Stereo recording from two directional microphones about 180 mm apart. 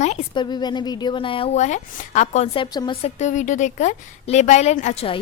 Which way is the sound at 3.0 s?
40° left (ahead or behind).